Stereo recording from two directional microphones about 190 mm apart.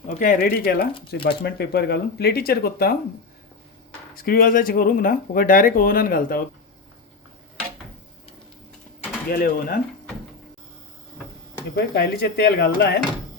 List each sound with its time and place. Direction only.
0.1 s speech: 45° left (ahead or behind)
4.1 s speech: 50° left (ahead or behind)
9.3 s speech: 50° left (ahead or behind)
11.7 s speech: 55° left (ahead or behind)